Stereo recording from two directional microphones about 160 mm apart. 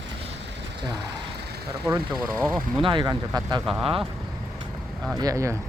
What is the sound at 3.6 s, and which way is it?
Speech, centre (ahead or behind).